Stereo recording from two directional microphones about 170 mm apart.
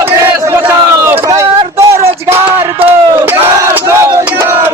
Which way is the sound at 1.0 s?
15° right (ahead or behind).